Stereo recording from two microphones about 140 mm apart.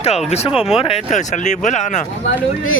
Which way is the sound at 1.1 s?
60° left (ahead or behind).